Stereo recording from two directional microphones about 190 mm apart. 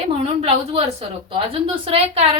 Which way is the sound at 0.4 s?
30° right (ahead or behind).